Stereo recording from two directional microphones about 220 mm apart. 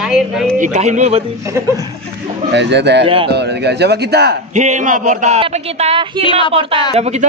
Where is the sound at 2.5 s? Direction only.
50° right (ahead or behind).